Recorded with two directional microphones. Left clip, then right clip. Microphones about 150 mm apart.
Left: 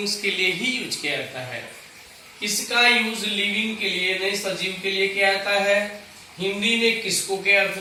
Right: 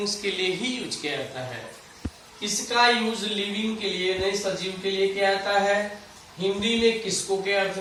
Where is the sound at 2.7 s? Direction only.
10° left (ahead or behind).